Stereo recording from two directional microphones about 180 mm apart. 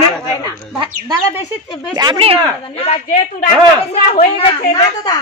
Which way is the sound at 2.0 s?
25° right (ahead or behind).